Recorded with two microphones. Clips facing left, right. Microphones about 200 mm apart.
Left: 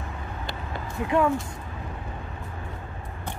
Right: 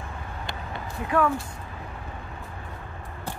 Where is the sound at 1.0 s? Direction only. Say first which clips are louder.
Left 1 dB; 20° left (ahead or behind).